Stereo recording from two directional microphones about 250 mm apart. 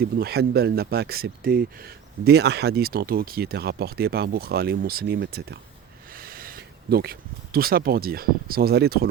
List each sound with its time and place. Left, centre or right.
0.0 s speech: right